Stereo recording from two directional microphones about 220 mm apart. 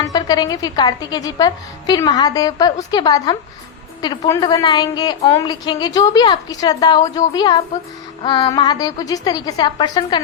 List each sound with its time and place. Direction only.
0.0 s a woman's voice: 15° left (ahead or behind)